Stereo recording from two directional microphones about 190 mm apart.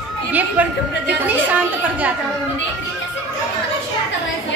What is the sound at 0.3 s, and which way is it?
A woman's voice, 10° right (ahead or behind).